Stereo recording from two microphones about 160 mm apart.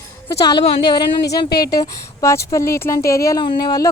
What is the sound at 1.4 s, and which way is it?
Speech, 75° left (ahead or behind).